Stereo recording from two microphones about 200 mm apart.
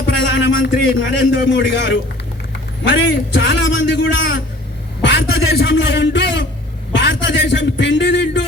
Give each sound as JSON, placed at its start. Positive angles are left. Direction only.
{"t": 0.0, "sound": "music", "side_deg": 60}
{"t": 1.2, "sound": "a man's voice", "side_deg": 60}
{"t": 5.0, "sound": "a sound", "side_deg": 60}
{"t": 5.6, "sound": "a man's voice", "side_deg": 65}